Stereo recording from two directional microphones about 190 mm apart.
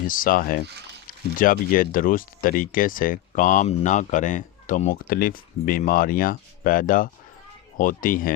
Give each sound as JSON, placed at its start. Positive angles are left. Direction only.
{"t": 0.1, "sound": "speech", "side_deg": 45}